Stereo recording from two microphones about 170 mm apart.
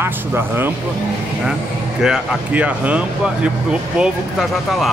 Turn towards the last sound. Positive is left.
turn(degrees=0)  # may be behind; listen again after turning